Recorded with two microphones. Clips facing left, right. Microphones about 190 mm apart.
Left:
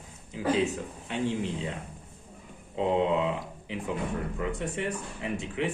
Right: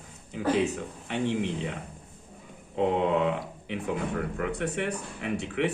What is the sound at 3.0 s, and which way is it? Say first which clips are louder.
Speech: right 1 dB; 65° right (ahead or behind).